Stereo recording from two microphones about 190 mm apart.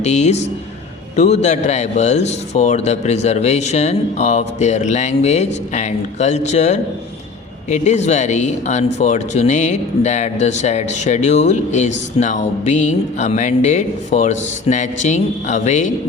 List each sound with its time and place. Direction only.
0.0 s speech: 35° left (ahead or behind)